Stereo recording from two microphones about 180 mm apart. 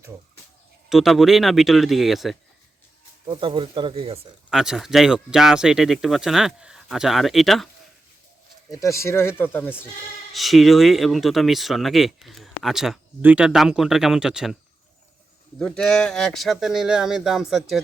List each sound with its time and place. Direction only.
0.9 s speech: centre (ahead or behind)
3.2 s speech: 25° right (ahead or behind)
4.5 s speech: 5° right (ahead or behind)
8.7 s speech: 15° left (ahead or behind)
10.3 s speech: centre (ahead or behind)
15.5 s speech: 5° left (ahead or behind)